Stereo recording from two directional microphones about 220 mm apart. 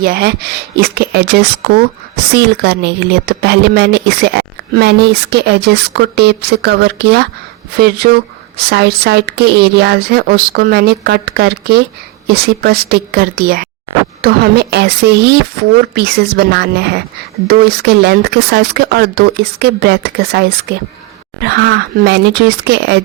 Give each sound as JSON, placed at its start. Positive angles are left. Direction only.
{"t": 0.0, "sound": "speech", "side_deg": -45}